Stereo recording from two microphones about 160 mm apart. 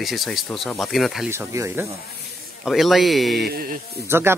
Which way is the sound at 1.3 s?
15° right (ahead or behind).